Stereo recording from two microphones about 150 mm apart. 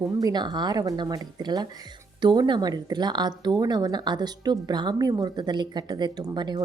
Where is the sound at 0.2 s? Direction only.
25° right (ahead or behind).